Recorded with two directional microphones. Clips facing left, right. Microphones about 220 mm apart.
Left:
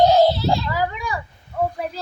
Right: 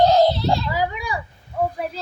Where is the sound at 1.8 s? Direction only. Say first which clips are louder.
Even; 5° right (ahead or behind).